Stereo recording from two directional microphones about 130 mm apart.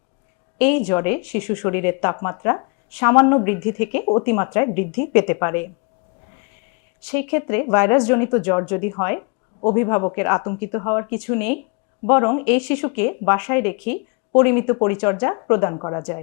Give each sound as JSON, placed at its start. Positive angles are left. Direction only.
{"t": 0.6, "sound": "speech", "side_deg": 20}
{"t": 7.1, "sound": "speech", "side_deg": 20}